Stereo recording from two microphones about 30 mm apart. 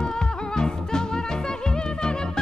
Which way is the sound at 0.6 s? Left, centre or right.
Left.